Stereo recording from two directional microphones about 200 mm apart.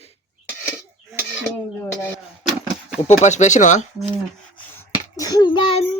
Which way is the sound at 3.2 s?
35° left (ahead or behind).